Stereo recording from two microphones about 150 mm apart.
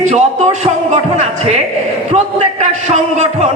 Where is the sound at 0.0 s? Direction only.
50° right (ahead or behind).